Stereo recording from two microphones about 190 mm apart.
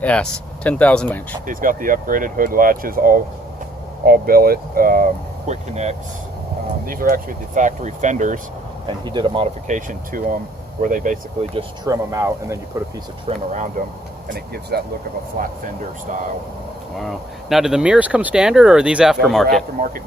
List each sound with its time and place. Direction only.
0.0 s speech: 5° left (ahead or behind)
1.5 s speech: 45° right (ahead or behind)
6.8 s speech: 50° right (ahead or behind)
8.9 s speech: 25° right (ahead or behind)
9.6 s speech: 45° right (ahead or behind)
11.9 s speech: 15° right (ahead or behind)
13.2 s speech: 40° right (ahead or behind)
14.3 s speech: 55° right (ahead or behind)
17.0 s speech: centre (ahead or behind)